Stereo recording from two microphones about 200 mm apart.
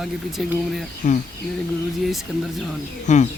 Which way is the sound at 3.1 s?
35° left (ahead or behind).